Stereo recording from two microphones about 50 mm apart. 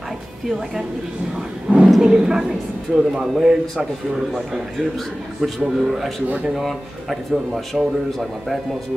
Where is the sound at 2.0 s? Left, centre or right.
Centre.